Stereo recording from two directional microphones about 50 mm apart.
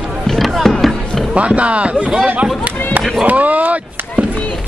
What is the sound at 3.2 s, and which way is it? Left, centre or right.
Speech, right.